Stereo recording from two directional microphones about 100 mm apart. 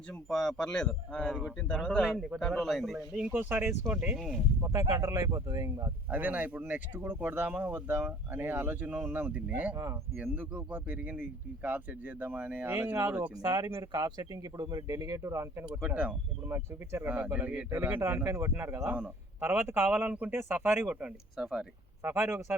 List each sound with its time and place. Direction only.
0.1 s a man's voice: 10° left (ahead or behind)
3.3 s a man's voice: 20° right (ahead or behind)
4.2 s a man's voice: centre (ahead or behind)
4.6 s speech: 30° right (ahead or behind)
6.1 s speech: 15° right (ahead or behind)
9.7 s speech: 30° right (ahead or behind)
10.2 s a man's voice: 15° right (ahead or behind)
13.4 s speech: 40° right (ahead or behind)
15.6 s speech: 15° right (ahead or behind)
16.5 s a man's voice: 25° right (ahead or behind)
18.9 s speech: 10° right (ahead or behind)
19.4 s a man's voice: 20° right (ahead or behind)
20.8 s a man's voice: 10° right (ahead or behind)
22.0 s a man's voice: 25° right (ahead or behind)